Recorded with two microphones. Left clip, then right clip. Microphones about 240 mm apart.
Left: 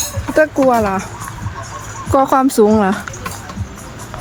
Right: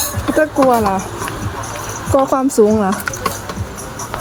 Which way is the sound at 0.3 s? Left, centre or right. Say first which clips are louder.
Left 1 dB; centre.